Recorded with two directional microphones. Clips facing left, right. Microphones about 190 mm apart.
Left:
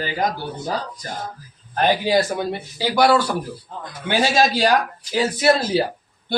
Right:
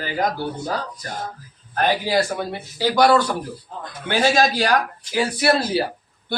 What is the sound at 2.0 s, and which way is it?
A man's voice, 15° left (ahead or behind).